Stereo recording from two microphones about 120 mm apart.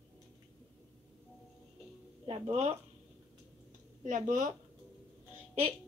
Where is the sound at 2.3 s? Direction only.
60° right (ahead or behind).